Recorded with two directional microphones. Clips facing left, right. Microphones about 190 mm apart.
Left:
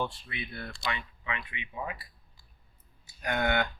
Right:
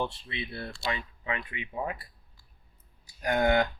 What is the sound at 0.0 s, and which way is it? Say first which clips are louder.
Speech: right 2 dB; 25° right (ahead or behind).